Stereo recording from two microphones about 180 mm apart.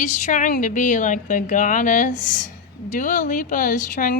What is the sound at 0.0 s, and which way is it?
Speech, 45° left (ahead or behind).